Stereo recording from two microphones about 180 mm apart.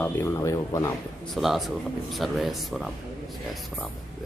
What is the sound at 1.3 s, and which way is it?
Speech, centre (ahead or behind).